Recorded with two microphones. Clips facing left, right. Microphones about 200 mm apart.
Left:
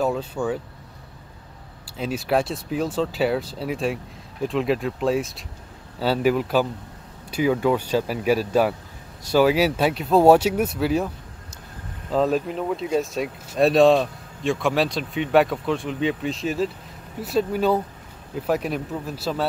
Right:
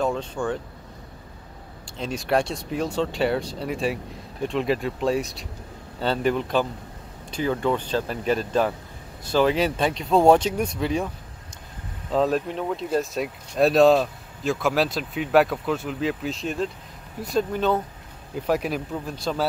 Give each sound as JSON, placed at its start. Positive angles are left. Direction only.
{"t": 0.0, "sound": "speech", "side_deg": 5}
{"t": 1.9, "sound": "speech", "side_deg": 5}
{"t": 12.1, "sound": "speech", "side_deg": 0}